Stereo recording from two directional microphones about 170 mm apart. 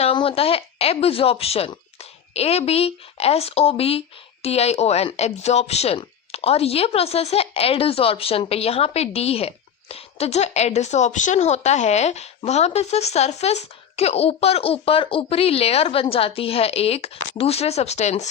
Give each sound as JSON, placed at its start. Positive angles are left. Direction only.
{"t": 0.0, "sound": "a woman's voice", "side_deg": 30}